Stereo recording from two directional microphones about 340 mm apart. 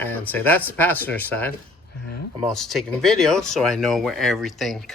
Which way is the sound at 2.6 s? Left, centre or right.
Centre.